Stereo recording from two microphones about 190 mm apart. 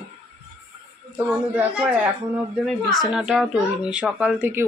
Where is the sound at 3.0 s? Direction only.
5° right (ahead or behind).